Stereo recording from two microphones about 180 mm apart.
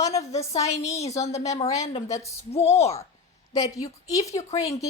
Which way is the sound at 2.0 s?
15° left (ahead or behind).